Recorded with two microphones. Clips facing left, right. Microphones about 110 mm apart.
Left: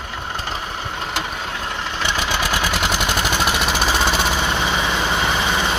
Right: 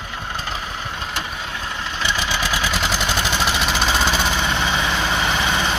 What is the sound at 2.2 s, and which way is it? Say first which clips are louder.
Vehicle: left 2 dB; 60° left (ahead or behind).